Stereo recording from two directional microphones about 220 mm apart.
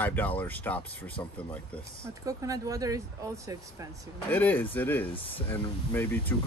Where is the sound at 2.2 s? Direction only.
15° right (ahead or behind).